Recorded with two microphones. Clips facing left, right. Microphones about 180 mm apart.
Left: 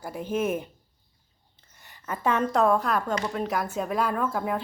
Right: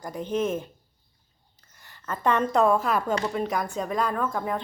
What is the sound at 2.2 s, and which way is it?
Speech, 5° left (ahead or behind).